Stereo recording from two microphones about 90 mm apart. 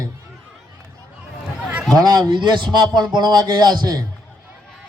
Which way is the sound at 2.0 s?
55° right (ahead or behind).